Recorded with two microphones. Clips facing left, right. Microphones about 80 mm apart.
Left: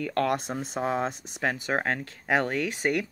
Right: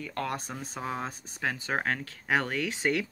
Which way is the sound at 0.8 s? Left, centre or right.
Left.